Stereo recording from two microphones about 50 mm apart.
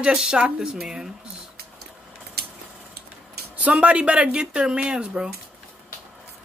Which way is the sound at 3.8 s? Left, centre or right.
Right.